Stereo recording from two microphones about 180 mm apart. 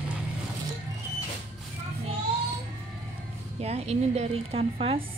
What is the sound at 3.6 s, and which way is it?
A woman's voice, 35° right (ahead or behind).